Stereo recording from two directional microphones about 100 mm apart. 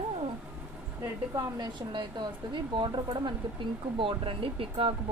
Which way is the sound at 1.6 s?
50° right (ahead or behind).